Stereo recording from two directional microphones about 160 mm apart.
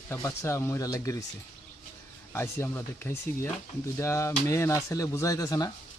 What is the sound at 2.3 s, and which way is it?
Speech, 15° left (ahead or behind).